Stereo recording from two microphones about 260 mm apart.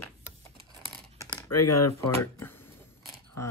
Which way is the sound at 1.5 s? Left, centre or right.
Left.